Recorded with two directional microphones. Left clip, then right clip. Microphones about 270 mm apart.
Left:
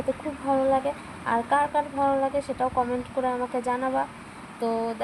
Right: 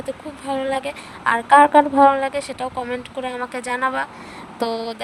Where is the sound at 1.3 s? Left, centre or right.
Right.